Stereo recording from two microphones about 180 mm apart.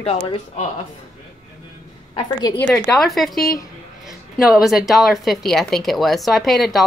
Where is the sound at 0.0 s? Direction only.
35° left (ahead or behind).